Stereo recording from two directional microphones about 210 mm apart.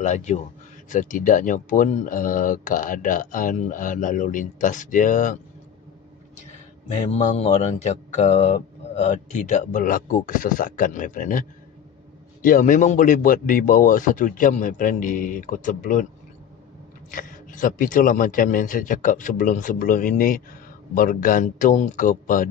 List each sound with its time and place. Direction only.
0.0 s speech: 35° left (ahead or behind)
7.1 s speech: 35° left (ahead or behind)
17.1 s speech: 40° left (ahead or behind)